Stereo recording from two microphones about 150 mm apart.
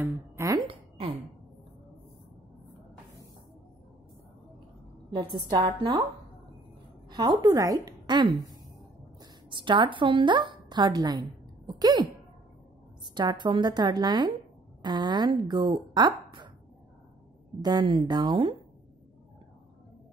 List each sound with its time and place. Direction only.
0.0 s a woman's voice: 20° right (ahead or behind)
0.6 s a sound: 35° right (ahead or behind)
5.1 s speech: 30° right (ahead or behind)
7.1 s a woman's voice: 25° right (ahead or behind)
17.6 s speech: 30° right (ahead or behind)